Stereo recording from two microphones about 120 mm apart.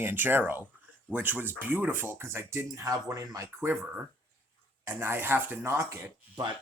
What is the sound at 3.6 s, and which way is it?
Speech, 15° right (ahead or behind).